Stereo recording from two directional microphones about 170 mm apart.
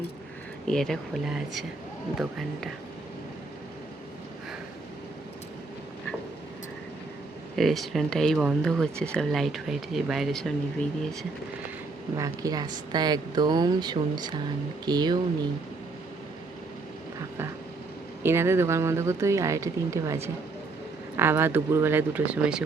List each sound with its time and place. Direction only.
0.7 s speech: centre (ahead or behind)
7.5 s speech: centre (ahead or behind)
12.1 s speech: 20° right (ahead or behind)
18.2 s speech: 15° right (ahead or behind)